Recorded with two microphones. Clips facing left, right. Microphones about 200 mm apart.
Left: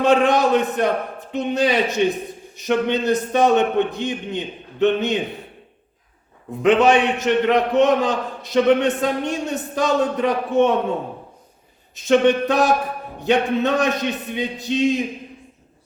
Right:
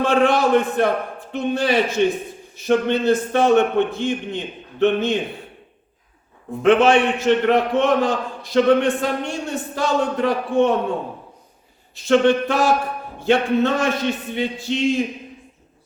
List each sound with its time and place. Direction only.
0.0 s a man's voice: 20° left (ahead or behind)
6.6 s a man's voice: 15° left (ahead or behind)
11.9 s a man's voice: 20° left (ahead or behind)